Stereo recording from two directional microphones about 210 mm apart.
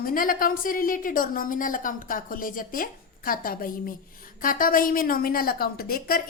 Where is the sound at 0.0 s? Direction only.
40° left (ahead or behind).